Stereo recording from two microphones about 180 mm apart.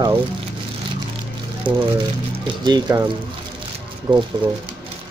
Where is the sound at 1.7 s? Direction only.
25° right (ahead or behind).